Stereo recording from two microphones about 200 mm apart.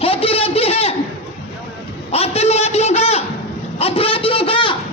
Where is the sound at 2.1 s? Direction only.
30° left (ahead or behind).